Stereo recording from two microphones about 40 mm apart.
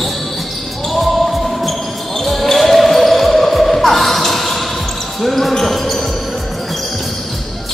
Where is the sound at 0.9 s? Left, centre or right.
Centre.